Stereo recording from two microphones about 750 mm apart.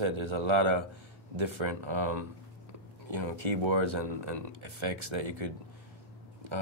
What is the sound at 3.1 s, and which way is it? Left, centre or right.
Speech, right.